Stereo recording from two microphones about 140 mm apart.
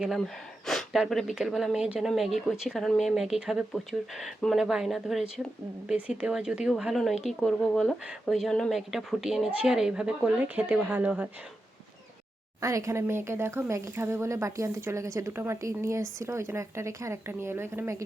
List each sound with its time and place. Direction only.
0.7 s speech: centre (ahead or behind)
12.6 s speech: 20° right (ahead or behind)